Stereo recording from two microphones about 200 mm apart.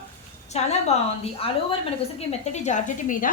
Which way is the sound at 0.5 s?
35° left (ahead or behind).